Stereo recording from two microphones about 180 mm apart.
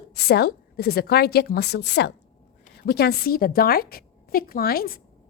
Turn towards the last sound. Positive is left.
turn(degrees=55)  # may be behind; listen again after turning